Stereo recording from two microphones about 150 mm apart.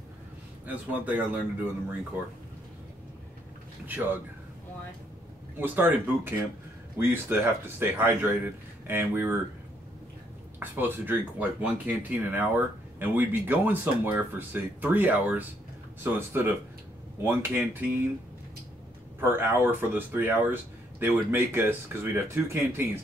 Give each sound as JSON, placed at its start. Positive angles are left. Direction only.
{"t": 0.7, "sound": "speech", "side_deg": -10}
{"t": 3.8, "sound": "speech", "side_deg": -10}
{"t": 5.6, "sound": "speech", "side_deg": -10}
{"t": 10.6, "sound": "speech", "side_deg": -10}
{"t": 19.2, "sound": "speech", "side_deg": -15}